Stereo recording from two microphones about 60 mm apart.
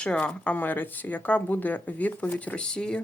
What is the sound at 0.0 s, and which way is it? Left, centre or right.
Speech, centre.